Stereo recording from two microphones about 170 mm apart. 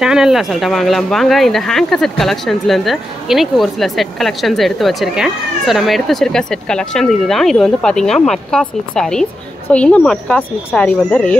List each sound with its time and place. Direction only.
0.0 s speech: 5° right (ahead or behind)